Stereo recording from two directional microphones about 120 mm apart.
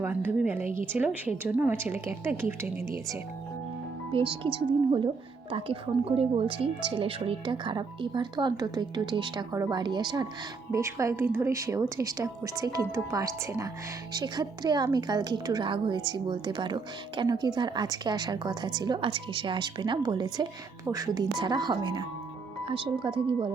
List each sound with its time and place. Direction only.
0.0 s a woman's voice: 15° right (ahead or behind)
4.1 s speech: 45° right (ahead or behind)
10.7 s a woman's voice: 25° right (ahead or behind); by 23.5 s 45° right (ahead or behind)